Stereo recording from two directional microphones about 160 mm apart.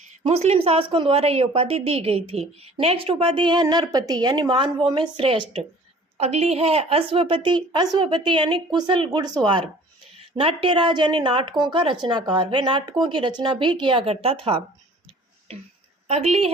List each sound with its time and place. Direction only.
0.3 s a woman's voice: 40° right (ahead or behind)
16.0 s a woman's voice: 45° right (ahead or behind)